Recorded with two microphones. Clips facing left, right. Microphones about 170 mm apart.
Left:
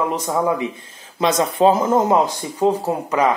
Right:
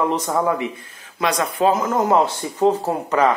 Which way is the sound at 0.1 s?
15° left (ahead or behind).